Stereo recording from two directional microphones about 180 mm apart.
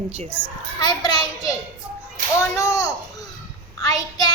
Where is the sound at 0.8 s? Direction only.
20° left (ahead or behind).